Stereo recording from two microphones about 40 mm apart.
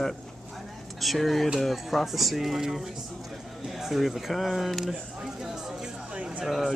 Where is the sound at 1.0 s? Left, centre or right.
Centre.